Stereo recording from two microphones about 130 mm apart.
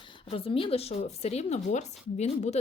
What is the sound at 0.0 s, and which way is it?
A woman's voice, 40° left (ahead or behind).